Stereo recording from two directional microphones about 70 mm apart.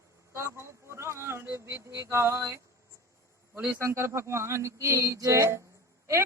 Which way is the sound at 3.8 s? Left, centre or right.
Right.